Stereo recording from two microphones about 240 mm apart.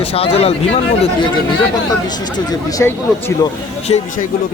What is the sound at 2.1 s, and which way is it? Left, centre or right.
Speech, centre.